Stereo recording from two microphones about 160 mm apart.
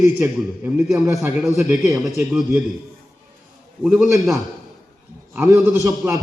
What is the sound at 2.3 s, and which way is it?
Speech, centre (ahead or behind).